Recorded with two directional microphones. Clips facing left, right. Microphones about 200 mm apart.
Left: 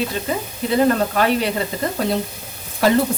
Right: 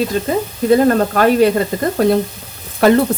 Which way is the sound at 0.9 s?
45° right (ahead or behind).